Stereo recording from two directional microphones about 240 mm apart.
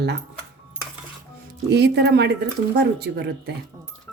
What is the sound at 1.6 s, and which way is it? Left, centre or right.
Speech, right.